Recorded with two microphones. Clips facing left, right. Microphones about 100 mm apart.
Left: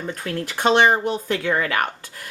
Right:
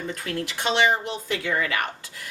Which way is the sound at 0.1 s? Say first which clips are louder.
Left 2 dB; 45° left (ahead or behind).